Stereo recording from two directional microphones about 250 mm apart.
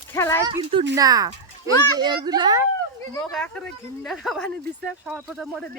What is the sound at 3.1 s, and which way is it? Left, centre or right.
Speech, centre.